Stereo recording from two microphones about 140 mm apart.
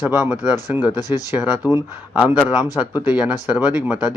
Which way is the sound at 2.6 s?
25° left (ahead or behind).